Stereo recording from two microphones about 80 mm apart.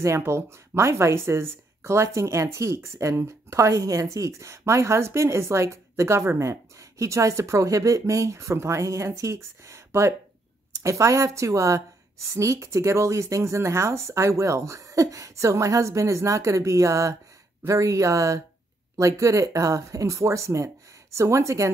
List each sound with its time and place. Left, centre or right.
0.0 s speech: right